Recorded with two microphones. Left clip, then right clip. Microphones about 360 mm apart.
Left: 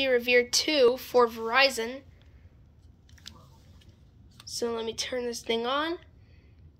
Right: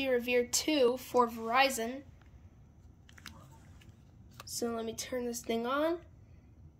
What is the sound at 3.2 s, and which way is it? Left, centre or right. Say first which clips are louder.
Biting: left 3 dB; centre.